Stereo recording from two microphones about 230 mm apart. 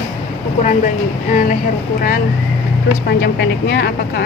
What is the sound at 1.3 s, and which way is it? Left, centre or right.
Speech, left.